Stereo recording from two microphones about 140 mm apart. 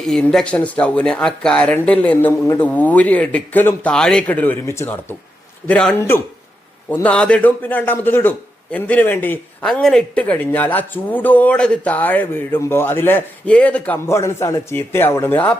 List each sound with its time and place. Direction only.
0.1 s a man's voice: 5° left (ahead or behind)